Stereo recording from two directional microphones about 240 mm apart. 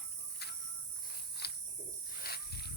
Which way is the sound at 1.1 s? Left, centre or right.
Left.